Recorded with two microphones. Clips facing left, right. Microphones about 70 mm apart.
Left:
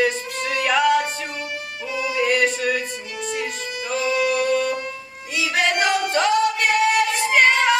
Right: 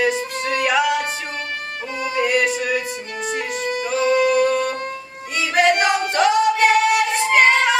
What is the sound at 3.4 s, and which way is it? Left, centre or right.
Music, right.